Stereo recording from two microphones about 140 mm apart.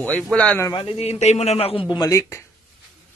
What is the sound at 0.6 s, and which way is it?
A man's voice, 35° left (ahead or behind).